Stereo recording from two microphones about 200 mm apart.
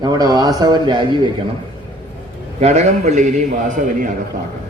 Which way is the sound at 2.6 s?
35° right (ahead or behind).